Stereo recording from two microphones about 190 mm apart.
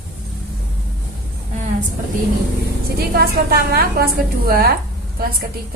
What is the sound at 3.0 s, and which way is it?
A woman's voice, 55° right (ahead or behind).